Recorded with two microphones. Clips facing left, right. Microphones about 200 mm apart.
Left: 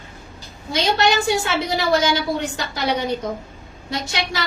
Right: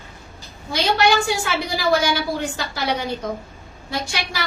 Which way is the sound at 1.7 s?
20° left (ahead or behind).